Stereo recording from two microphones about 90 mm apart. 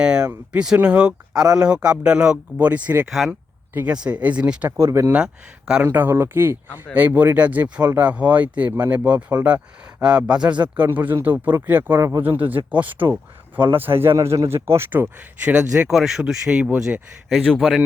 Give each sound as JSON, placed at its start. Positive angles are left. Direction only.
{"t": 0.0, "sound": "speech", "side_deg": -10}
{"t": 3.1, "sound": "speech", "side_deg": 0}
{"t": 4.0, "sound": "speech", "side_deg": -15}
{"t": 4.8, "sound": "speech", "side_deg": -35}
{"t": 5.1, "sound": "speech", "side_deg": -10}
{"t": 5.8, "sound": "speech", "side_deg": -20}
{"t": 11.9, "sound": "speech", "side_deg": -30}
{"t": 17.4, "sound": "speech", "side_deg": 5}